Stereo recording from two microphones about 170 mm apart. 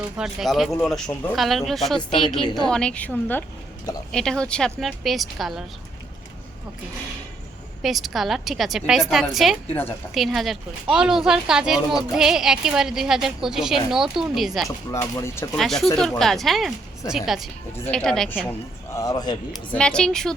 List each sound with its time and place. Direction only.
0.2 s a woman's voice: centre (ahead or behind)
7.8 s speech: centre (ahead or behind)
15.1 s a woman's voice: 15° left (ahead or behind)
15.5 s speech: centre (ahead or behind)
18.9 s speech: 20° left (ahead or behind)
19.7 s speech: 5° left (ahead or behind)